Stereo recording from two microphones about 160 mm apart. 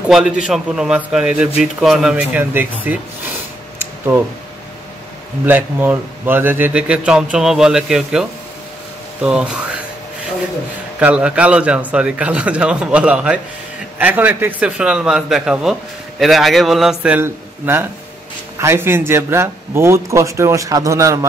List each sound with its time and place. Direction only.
0.0 s a man's voice: 5° right (ahead or behind)
5.4 s a man's voice: 10° right (ahead or behind)
11.0 s a man's voice: 5° right (ahead or behind)